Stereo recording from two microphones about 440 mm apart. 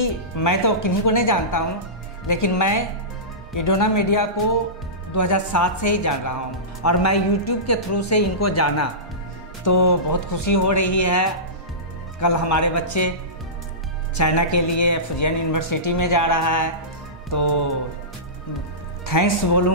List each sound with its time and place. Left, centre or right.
0.0 s speech: left
14.1 s speech: left
19.0 s speech: left